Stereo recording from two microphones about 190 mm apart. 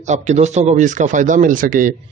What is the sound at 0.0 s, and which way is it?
A man's voice, 40° right (ahead or behind).